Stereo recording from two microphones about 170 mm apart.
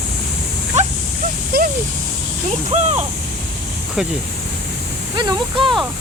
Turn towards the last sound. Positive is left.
turn(degrees=-25)  # may be behind; listen again after turning